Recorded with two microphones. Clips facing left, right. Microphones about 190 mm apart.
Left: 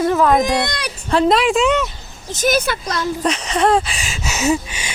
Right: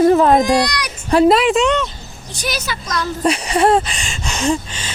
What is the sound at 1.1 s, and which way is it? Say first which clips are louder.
Speech: right 4 dB; 10° right (ahead or behind).